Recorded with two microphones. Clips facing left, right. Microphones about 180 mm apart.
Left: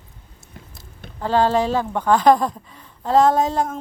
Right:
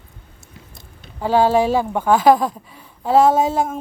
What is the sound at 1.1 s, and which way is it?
A woman's voice, 10° right (ahead or behind).